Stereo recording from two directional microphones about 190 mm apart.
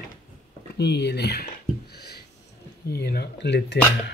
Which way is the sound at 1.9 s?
55° left (ahead or behind).